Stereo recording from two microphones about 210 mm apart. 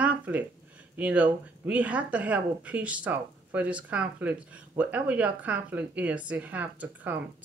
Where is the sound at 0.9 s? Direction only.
5° right (ahead or behind).